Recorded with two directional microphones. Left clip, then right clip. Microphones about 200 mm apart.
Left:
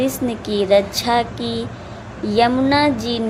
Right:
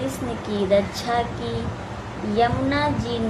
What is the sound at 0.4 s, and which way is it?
Speech, 40° left (ahead or behind).